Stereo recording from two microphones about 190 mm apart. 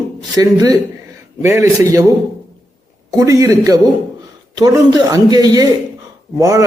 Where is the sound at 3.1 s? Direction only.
15° right (ahead or behind).